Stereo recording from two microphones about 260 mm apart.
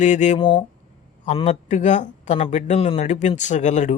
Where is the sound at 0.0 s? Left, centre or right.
Left.